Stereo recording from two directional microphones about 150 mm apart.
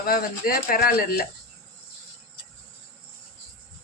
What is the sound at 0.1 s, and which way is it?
Speech, 75° left (ahead or behind).